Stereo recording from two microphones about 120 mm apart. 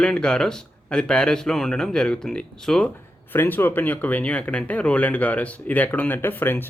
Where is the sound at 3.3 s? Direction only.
20° left (ahead or behind).